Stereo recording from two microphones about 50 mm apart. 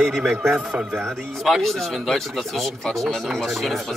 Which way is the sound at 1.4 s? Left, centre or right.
Centre.